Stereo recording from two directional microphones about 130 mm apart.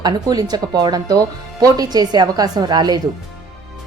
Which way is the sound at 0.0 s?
30° right (ahead or behind).